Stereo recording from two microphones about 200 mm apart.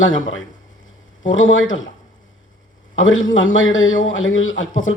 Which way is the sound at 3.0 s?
75° left (ahead or behind).